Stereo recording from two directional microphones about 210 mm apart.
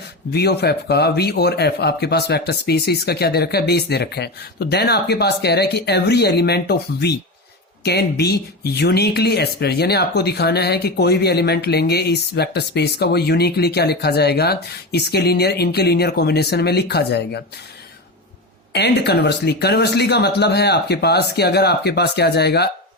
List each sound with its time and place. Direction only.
0.3 s speech: 50° left (ahead or behind)
18.7 s speech: 50° left (ahead or behind)